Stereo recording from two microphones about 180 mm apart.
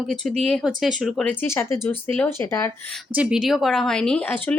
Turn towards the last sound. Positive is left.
turn(degrees=10)  # may be behind; listen again after turning